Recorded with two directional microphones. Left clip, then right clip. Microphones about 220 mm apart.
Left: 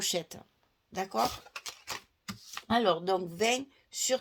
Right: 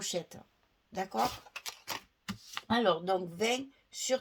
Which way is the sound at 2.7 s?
35° left (ahead or behind).